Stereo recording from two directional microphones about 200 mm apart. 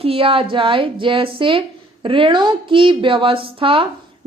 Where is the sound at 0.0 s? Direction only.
25° right (ahead or behind).